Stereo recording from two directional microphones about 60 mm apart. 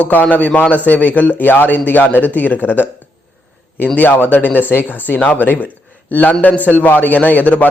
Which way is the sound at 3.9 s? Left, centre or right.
Left.